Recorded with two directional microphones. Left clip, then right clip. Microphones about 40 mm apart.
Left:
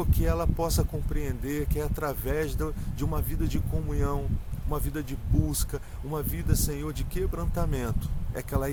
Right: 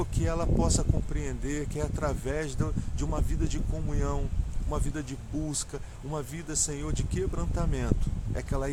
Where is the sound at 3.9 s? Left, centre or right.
Left.